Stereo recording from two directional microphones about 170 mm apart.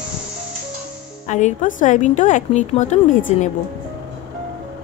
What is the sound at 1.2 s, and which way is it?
A woman's voice, 45° left (ahead or behind).